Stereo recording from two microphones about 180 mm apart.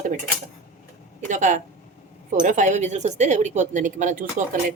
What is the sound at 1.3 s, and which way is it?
Speech, 45° right (ahead or behind).